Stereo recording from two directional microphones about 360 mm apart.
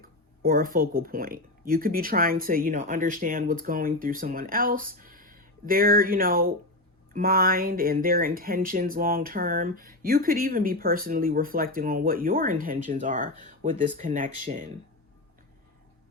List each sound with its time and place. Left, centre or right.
0.4 s speech: right